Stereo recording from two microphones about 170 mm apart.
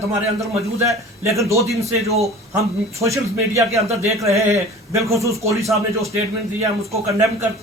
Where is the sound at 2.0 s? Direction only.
40° right (ahead or behind).